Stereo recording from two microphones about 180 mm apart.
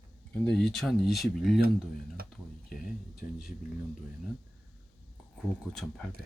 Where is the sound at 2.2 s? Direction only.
55° right (ahead or behind).